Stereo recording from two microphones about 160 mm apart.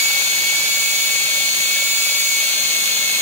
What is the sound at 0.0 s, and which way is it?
Jet engine, 45° right (ahead or behind).